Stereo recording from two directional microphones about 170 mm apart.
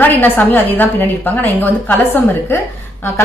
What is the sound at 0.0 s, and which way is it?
A woman's voice, 10° left (ahead or behind).